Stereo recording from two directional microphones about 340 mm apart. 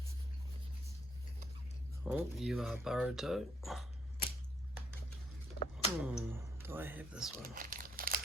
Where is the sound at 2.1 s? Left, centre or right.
Centre.